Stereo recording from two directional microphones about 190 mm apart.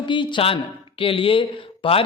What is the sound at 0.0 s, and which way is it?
Speech, 25° left (ahead or behind).